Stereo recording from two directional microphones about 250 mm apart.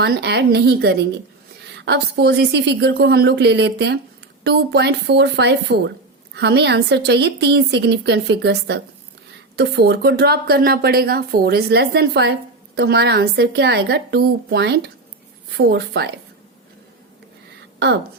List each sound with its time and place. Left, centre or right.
0.0 s a woman's voice: right